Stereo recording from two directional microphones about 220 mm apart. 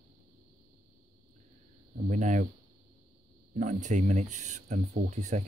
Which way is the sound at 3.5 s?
35° right (ahead or behind).